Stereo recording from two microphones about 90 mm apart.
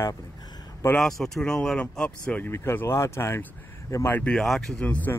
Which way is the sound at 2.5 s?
30° left (ahead or behind).